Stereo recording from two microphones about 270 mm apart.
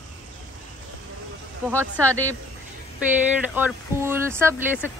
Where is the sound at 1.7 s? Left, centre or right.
Centre.